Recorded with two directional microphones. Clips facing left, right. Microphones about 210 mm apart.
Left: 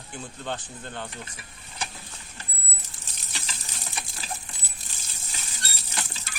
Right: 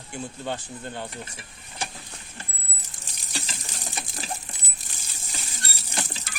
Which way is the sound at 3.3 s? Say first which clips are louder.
Right 5 dB; 35° right (ahead or behind).